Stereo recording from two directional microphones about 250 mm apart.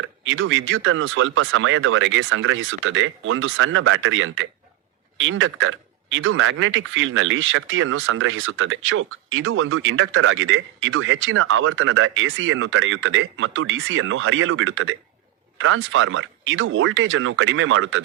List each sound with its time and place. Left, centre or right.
0.0 s speech: right